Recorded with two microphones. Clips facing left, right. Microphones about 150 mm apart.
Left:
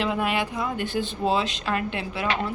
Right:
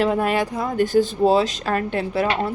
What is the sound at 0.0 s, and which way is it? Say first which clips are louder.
A woman's voice: right 5 dB; 40° right (ahead or behind).